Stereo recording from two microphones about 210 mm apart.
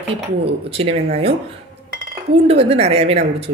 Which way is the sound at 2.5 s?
30° right (ahead or behind).